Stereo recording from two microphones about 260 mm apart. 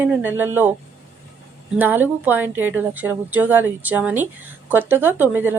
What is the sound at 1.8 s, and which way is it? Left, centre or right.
Speech, centre.